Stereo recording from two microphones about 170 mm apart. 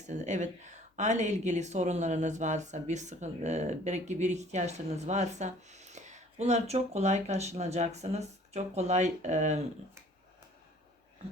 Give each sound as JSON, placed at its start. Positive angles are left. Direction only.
{"t": 0.1, "sound": "a woman's voice", "side_deg": -45}